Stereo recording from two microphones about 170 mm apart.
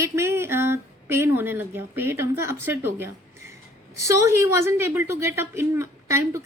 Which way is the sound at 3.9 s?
20° right (ahead or behind).